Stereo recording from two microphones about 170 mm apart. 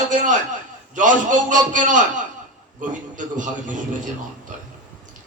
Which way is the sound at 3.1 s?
50° right (ahead or behind).